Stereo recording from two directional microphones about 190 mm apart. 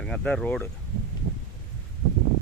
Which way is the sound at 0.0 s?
5° left (ahead or behind).